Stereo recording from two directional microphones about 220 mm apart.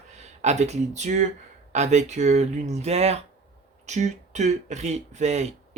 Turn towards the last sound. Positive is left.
turn(degrees=-30)  # may be behind; listen again after turning